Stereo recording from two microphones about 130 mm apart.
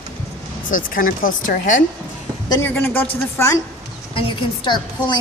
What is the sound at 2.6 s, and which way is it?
A man's voice, 15° left (ahead or behind).